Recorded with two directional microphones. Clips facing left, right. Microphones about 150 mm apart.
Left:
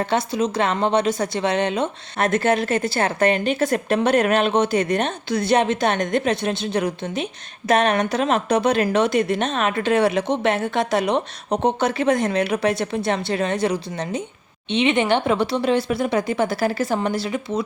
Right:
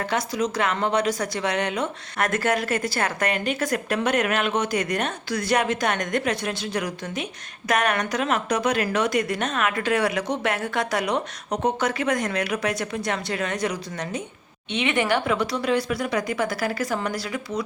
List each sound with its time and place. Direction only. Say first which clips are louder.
0.0 s a woman's voice: left 4 dB; 25° left (ahead or behind)